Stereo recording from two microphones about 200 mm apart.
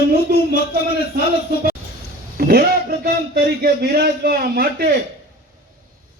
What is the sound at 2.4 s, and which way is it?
Speech, 50° right (ahead or behind).